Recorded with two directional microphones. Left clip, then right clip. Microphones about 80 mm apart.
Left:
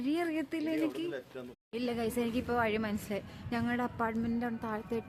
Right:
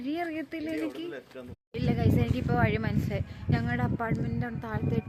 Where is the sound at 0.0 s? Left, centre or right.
Left.